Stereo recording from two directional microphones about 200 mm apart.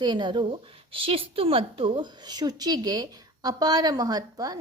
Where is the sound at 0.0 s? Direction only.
20° right (ahead or behind).